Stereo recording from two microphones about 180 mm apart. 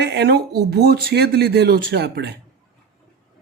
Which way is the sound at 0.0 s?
70° right (ahead or behind).